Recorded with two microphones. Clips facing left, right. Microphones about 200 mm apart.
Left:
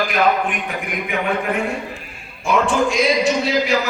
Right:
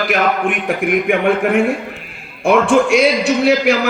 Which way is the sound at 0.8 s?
55° right (ahead or behind).